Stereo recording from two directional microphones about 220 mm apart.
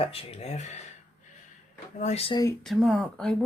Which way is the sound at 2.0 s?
30° left (ahead or behind).